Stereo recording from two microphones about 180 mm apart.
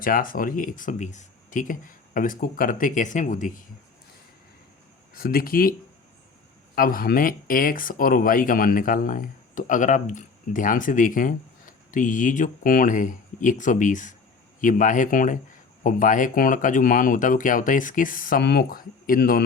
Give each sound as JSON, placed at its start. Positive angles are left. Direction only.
{"t": 0.0, "sound": "speech", "side_deg": 50}
{"t": 5.1, "sound": "speech", "side_deg": 55}
{"t": 6.7, "sound": "speech", "side_deg": 50}